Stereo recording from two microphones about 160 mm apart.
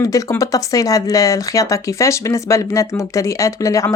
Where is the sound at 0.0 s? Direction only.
20° left (ahead or behind).